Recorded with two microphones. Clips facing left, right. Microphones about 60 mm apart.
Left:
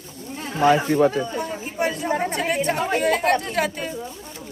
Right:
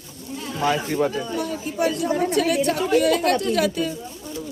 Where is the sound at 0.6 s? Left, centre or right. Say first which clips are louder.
Left 5 dB; left.